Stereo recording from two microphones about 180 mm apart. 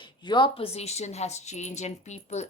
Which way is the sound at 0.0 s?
25° left (ahead or behind).